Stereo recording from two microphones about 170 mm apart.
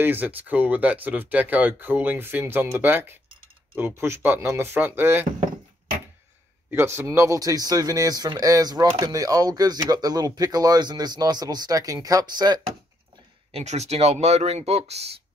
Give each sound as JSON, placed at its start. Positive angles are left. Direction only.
{"t": 0.0, "sound": "speech", "side_deg": -10}
{"t": 6.7, "sound": "speech", "side_deg": -15}
{"t": 13.5, "sound": "speech", "side_deg": -40}